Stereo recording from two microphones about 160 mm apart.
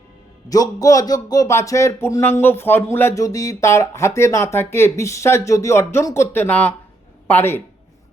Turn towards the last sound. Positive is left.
turn(degrees=15)  # may be behind; listen again after turning